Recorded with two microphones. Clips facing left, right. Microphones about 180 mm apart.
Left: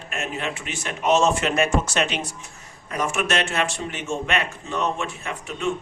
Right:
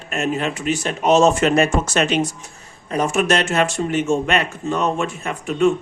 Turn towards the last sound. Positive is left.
turn(degrees=-45)  # may be behind; listen again after turning